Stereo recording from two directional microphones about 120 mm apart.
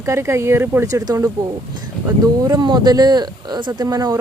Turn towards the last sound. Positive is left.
turn(degrees=-35)  # may be behind; listen again after turning